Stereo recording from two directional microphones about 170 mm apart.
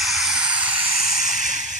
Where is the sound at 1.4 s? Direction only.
45° right (ahead or behind).